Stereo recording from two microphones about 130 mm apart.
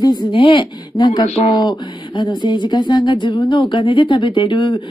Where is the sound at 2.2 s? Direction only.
35° left (ahead or behind).